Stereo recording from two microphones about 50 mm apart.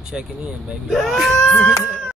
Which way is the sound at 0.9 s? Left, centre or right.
Centre.